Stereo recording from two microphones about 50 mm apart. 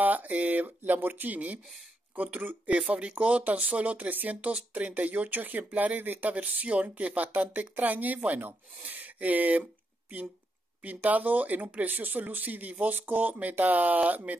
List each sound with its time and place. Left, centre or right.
0.0 s speech: right